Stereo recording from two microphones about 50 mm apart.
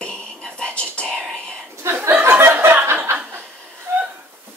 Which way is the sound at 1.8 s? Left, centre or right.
Right.